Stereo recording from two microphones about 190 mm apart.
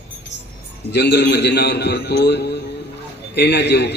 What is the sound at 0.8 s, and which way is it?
A man's voice, 60° left (ahead or behind).